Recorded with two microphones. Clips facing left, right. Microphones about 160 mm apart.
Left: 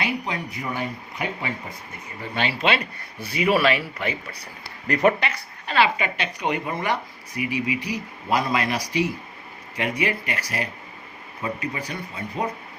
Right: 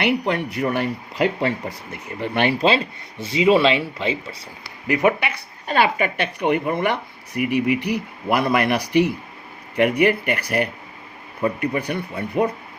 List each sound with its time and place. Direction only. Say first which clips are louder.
0.0 s speech: right 7 dB; 65° right (ahead or behind)
2.6 s speech: right 5 dB; 30° right (ahead or behind)
4.9 s speech: right 1 dB; 10° right (ahead or behind)
5.6 s speech: right 2 dB; 50° right (ahead or behind)